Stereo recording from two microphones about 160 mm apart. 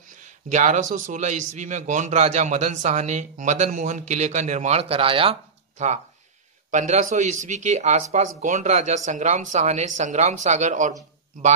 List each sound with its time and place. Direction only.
0.2 s speech: 50° right (ahead or behind)